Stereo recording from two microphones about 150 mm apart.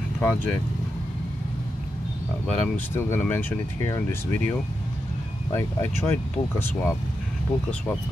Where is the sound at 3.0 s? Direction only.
15° left (ahead or behind).